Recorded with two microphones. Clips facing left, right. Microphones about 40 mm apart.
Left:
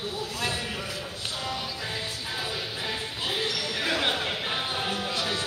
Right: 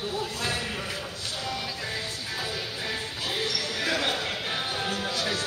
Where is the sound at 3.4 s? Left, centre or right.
Left.